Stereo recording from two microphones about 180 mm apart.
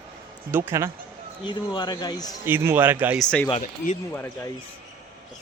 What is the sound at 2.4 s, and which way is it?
Speech, 15° right (ahead or behind).